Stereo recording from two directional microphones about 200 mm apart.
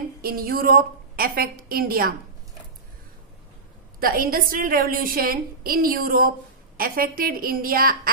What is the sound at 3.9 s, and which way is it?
A woman's voice, 45° right (ahead or behind).